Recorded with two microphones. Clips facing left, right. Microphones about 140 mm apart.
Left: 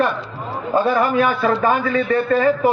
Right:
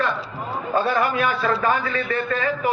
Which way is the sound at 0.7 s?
20° left (ahead or behind).